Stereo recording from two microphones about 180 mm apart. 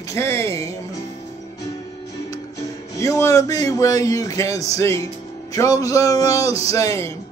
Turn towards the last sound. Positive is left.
turn(degrees=15)  # may be behind; listen again after turning